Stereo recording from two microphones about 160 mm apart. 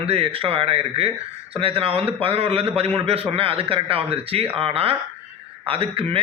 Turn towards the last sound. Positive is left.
turn(degrees=-35)  # may be behind; listen again after turning